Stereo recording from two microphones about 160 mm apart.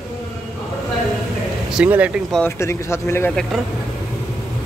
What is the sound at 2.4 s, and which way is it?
Speech, 15° left (ahead or behind).